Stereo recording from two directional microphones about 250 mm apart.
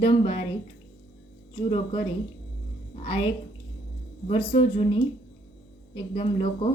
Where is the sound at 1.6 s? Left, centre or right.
Left.